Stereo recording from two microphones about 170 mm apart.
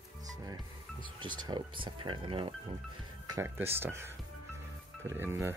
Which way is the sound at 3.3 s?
15° right (ahead or behind).